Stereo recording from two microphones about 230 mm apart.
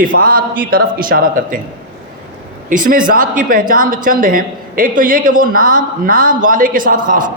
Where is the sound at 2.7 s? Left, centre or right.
Right.